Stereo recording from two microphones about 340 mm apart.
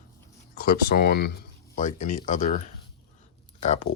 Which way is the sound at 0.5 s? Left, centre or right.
Left.